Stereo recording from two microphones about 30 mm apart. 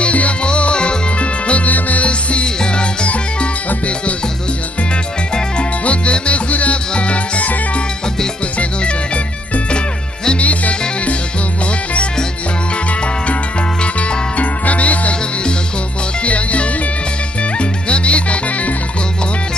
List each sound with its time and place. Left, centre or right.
0.0 s music: left
0.4 s music: left
1.7 s music: left
2.0 s music: left
3.1 s music: left
5.6 s music: left
8.5 s music: left
10.4 s music: left
14.3 s music: left
16.3 s music: left